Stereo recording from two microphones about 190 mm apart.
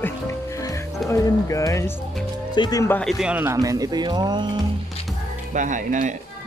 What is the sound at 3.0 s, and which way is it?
Speech, centre (ahead or behind).